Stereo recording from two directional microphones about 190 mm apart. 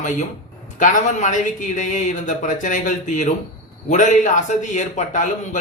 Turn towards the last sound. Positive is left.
turn(degrees=40)  # may be behind; listen again after turning